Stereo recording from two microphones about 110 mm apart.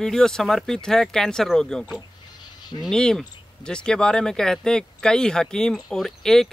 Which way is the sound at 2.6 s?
40° left (ahead or behind).